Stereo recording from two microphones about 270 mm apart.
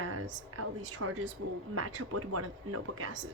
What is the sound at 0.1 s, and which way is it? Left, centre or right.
Speech, right.